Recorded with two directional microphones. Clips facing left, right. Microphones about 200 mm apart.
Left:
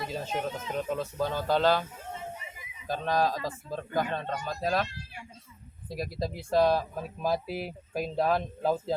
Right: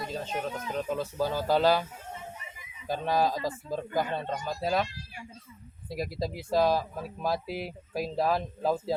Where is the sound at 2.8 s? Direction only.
10° right (ahead or behind).